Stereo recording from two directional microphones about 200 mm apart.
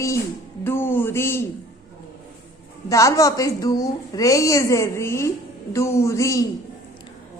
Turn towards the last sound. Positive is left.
turn(degrees=15)  # may be behind; listen again after turning